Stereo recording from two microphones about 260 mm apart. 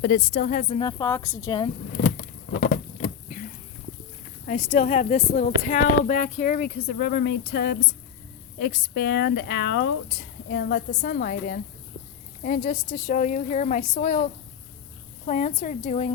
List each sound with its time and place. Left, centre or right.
0.0 s speech: left; by 1.7 s centre
2.5 s patter: left
4.4 s speech: left
15.3 s speech: left